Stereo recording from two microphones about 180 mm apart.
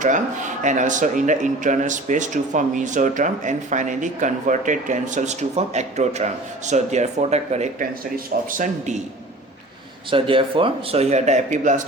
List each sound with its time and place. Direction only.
0.0 s speech: 45° right (ahead or behind)
10.1 s a man's voice: 30° right (ahead or behind)